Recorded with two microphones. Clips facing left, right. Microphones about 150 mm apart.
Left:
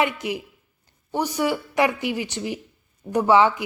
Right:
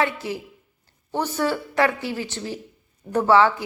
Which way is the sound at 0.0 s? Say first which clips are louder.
Left 1 dB; 15° left (ahead or behind).